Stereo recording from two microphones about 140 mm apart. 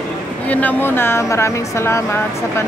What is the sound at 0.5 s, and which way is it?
Speech, 10° left (ahead or behind).